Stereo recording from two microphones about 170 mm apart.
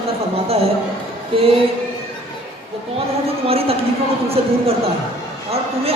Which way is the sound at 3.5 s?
35° right (ahead or behind).